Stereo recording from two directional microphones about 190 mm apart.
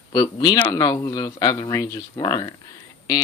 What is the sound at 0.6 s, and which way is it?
Speech, 10° left (ahead or behind).